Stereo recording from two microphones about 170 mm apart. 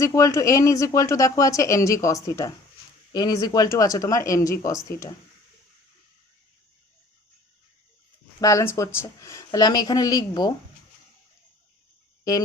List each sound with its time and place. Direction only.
0.0 s speech: 20° left (ahead or behind)
8.4 s speech: 20° left (ahead or behind)